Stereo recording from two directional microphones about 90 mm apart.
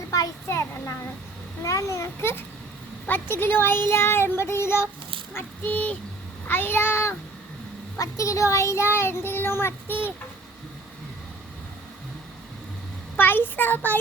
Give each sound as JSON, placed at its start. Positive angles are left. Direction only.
{"t": 0.1, "sound": "a sound", "side_deg": 35}
{"t": 1.6, "sound": "a child's voice", "side_deg": 35}
{"t": 13.1, "sound": "a child's voice", "side_deg": 25}